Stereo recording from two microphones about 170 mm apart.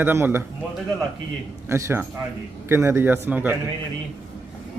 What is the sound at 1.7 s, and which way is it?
A man's voice, 15° right (ahead or behind).